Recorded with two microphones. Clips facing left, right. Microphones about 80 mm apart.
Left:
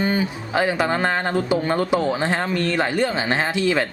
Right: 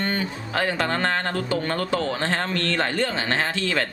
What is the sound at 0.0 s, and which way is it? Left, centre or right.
Speech, centre.